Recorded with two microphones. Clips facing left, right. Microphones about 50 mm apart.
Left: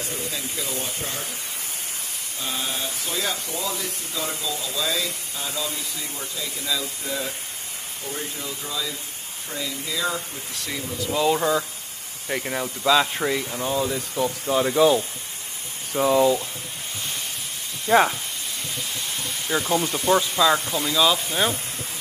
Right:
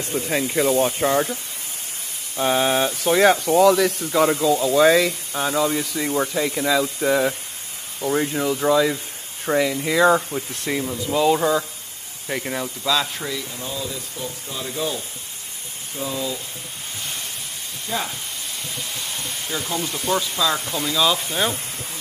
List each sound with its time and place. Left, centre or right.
0.3 s speech: right
2.3 s speech: right
11.1 s speech: centre
12.8 s speech: centre
13.7 s speech: left
17.8 s speech: left
19.7 s speech: centre
20.7 s speech: centre